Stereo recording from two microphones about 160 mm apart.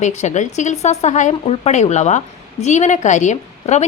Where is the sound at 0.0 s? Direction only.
50° left (ahead or behind).